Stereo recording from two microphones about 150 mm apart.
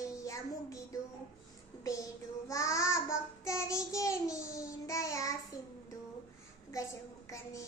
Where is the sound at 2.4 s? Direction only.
20° left (ahead or behind).